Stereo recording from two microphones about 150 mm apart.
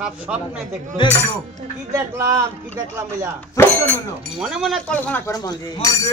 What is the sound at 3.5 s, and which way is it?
Speech, 15° left (ahead or behind).